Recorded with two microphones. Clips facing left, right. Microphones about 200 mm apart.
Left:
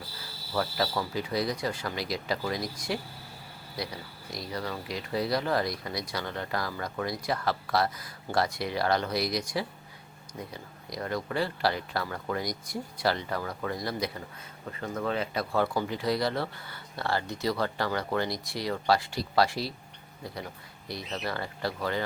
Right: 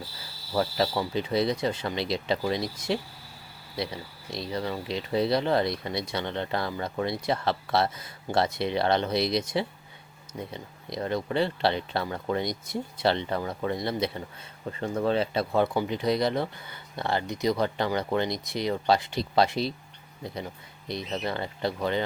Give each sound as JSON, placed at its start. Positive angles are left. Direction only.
{"t": 0.5, "sound": "speech", "side_deg": -25}
{"t": 20.8, "sound": "speech", "side_deg": -20}